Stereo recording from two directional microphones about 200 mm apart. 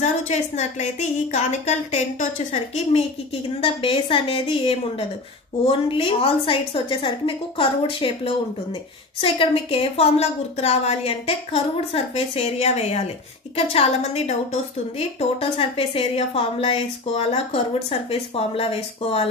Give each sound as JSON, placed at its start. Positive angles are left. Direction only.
{"t": 0.0, "sound": "a woman's voice", "side_deg": 35}
{"t": 3.6, "sound": "a woman's voice", "side_deg": 25}